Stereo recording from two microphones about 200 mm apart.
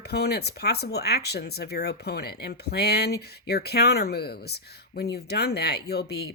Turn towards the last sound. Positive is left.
turn(degrees=55)  # may be behind; listen again after turning